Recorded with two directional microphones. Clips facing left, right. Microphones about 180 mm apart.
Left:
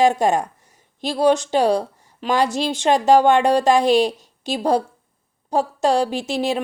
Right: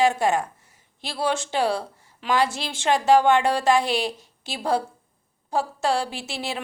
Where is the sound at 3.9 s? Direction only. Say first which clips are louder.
Left 9 dB; 45° left (ahead or behind).